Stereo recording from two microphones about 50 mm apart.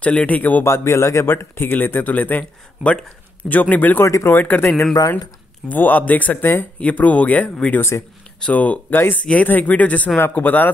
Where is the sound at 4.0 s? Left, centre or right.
Left.